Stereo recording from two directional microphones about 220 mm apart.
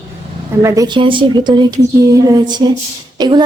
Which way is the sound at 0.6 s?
15° right (ahead or behind).